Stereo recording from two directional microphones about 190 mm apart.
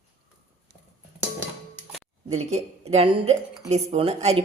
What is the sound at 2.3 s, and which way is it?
A woman's voice, 35° right (ahead or behind).